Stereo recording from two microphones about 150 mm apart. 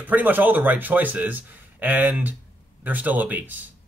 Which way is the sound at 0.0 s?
10° right (ahead or behind).